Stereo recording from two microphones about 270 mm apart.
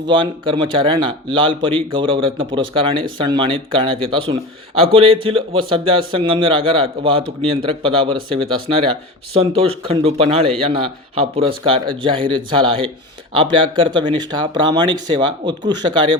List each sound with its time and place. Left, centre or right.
0.1 s speech: centre